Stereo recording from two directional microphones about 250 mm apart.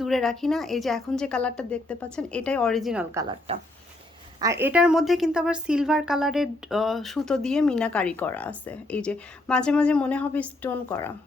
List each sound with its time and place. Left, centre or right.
0.0 s speech: centre
3.2 s speech: right
4.6 s speech: centre